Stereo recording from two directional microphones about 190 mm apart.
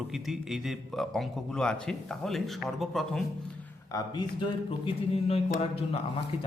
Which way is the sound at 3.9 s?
20° left (ahead or behind).